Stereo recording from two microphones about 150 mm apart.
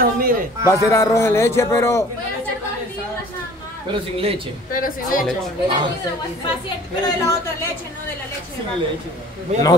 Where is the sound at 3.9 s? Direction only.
35° right (ahead or behind).